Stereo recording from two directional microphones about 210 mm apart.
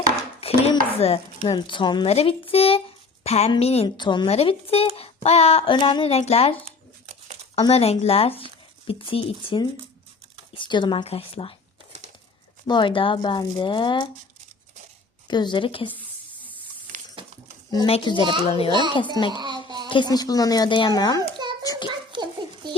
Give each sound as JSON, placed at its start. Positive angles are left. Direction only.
{"t": 0.3, "sound": "dishes", "side_deg": 30}
{"t": 0.9, "sound": "speech", "side_deg": 30}
{"t": 12.6, "sound": "speech", "side_deg": 20}
{"t": 15.3, "sound": "speech", "side_deg": 20}
{"t": 17.7, "sound": "speech", "side_deg": 25}
{"t": 18.7, "sound": "speech", "side_deg": -20}
{"t": 19.3, "sound": "babbling", "side_deg": -20}
{"t": 19.9, "sound": "speech", "side_deg": 20}
{"t": 21.2, "sound": "a sound", "side_deg": -20}
{"t": 21.6, "sound": "a sound", "side_deg": 20}
{"t": 22.1, "sound": "a sound", "side_deg": -20}